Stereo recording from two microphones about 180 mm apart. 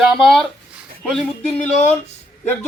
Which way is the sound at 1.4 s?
40° left (ahead or behind).